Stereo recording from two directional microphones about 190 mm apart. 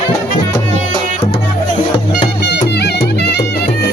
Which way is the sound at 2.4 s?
60° left (ahead or behind).